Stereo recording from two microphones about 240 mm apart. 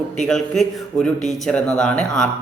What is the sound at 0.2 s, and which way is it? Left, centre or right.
A man's voice, centre.